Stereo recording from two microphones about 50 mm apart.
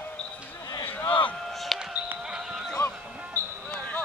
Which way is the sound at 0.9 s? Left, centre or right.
Left.